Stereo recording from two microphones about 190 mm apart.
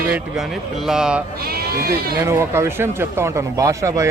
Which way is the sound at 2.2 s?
15° right (ahead or behind).